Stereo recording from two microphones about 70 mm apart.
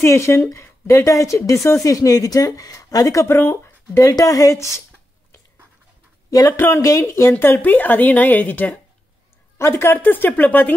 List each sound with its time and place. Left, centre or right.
0.0 s a woman's voice: left
3.3 s speech: left
4.1 s speech: left
6.5 s a woman's voice: left
9.6 s speech: left
9.9 s a woman's voice: left